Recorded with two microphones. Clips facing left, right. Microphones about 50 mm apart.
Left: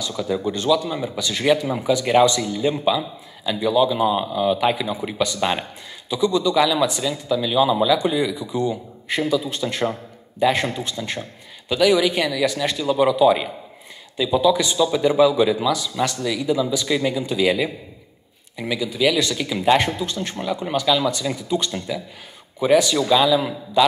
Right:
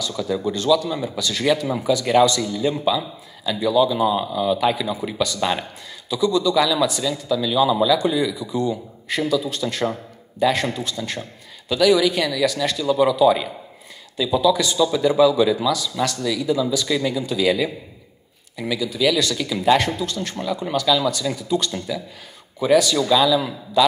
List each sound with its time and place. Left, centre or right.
0.0 s a man's voice: left